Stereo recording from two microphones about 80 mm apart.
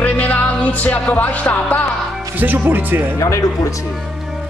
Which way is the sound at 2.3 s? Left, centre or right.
Right.